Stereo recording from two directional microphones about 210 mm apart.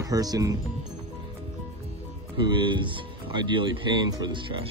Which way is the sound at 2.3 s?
20° right (ahead or behind).